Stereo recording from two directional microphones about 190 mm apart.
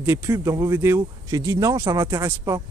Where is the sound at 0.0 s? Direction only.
15° right (ahead or behind).